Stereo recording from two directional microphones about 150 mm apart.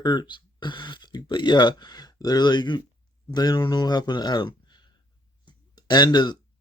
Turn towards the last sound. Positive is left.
turn(degrees=25)  # may be behind; listen again after turning